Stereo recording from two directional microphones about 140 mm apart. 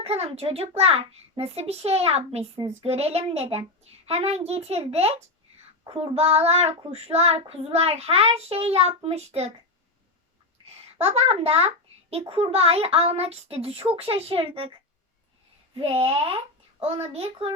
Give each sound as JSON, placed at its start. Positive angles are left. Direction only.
{"t": 0.0, "sound": "child singing", "side_deg": -45}
{"t": 10.9, "sound": "child singing", "side_deg": -45}
{"t": 15.7, "sound": "child singing", "side_deg": -45}